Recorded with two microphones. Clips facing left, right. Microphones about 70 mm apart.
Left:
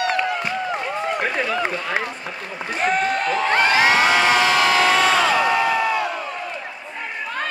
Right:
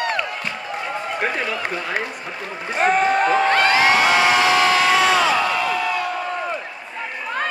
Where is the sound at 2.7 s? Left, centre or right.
Right.